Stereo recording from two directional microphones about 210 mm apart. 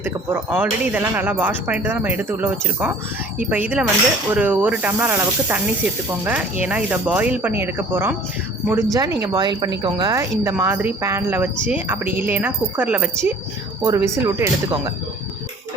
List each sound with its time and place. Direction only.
0.0 s speech: 10° right (ahead or behind)